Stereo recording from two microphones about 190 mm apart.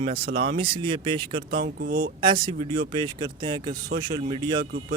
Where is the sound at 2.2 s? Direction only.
25° right (ahead or behind).